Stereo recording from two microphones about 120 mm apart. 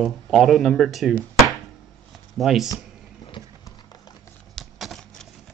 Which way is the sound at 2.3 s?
Centre (ahead or behind).